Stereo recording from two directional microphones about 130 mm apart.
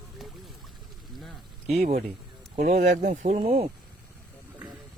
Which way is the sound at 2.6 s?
70° right (ahead or behind).